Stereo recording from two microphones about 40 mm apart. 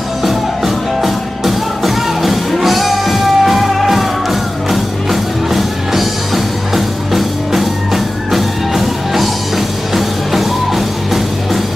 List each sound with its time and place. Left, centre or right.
1.0 s music: centre